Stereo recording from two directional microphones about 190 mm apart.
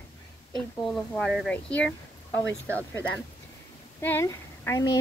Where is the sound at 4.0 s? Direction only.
10° left (ahead or behind).